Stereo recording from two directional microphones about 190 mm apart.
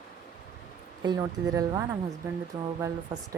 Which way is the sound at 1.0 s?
20° right (ahead or behind).